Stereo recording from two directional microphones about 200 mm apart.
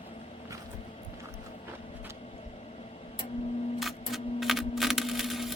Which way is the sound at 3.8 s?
Centre (ahead or behind).